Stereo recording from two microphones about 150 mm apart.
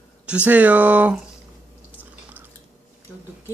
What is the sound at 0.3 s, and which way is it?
Speech, 10° right (ahead or behind).